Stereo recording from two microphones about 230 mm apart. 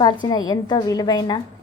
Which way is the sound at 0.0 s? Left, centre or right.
Centre.